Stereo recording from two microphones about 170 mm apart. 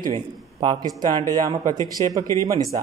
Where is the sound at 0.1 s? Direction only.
30° right (ahead or behind).